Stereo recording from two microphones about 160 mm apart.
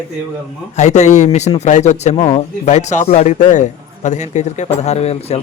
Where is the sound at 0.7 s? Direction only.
45° left (ahead or behind).